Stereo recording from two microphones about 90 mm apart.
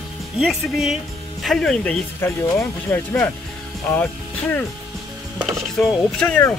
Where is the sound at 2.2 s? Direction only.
25° left (ahead or behind).